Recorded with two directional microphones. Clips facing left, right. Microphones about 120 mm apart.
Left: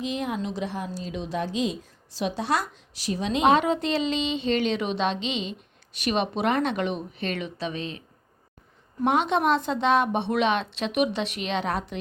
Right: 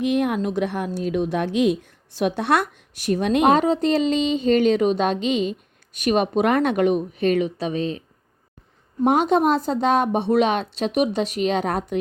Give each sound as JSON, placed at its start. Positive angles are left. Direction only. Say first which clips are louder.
{"t": 0.0, "sound": "a woman's voice", "louder": "right 8 dB", "side_deg": -60}
{"t": 3.6, "sound": "a woman's voice", "louder": "right 6 dB", "side_deg": -40}
{"t": 9.0, "sound": "a woman's voice", "louder": "right 5 dB", "side_deg": -45}